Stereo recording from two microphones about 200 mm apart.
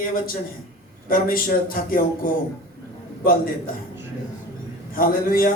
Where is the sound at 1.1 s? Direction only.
45° left (ahead or behind).